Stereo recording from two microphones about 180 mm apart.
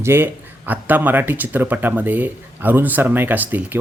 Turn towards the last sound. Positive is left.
turn(degrees=-10)  # may be behind; listen again after turning